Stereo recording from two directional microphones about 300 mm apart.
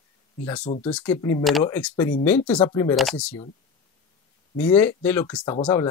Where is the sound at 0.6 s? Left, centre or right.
Left.